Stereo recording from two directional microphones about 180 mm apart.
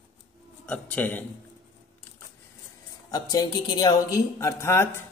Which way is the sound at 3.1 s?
20° left (ahead or behind).